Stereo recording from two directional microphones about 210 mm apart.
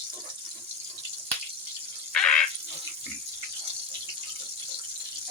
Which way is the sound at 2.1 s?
5° left (ahead or behind).